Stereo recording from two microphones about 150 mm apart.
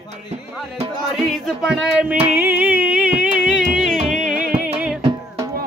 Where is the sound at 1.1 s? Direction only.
Centre (ahead or behind).